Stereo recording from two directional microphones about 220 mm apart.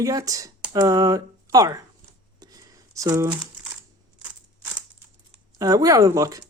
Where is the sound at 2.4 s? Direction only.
15° right (ahead or behind).